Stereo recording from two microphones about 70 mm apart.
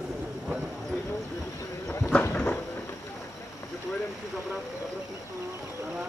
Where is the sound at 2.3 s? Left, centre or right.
Left.